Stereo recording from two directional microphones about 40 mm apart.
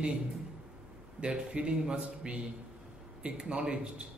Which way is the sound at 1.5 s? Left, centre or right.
Right.